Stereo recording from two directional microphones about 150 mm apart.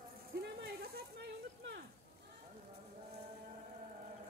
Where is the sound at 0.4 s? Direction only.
90° right.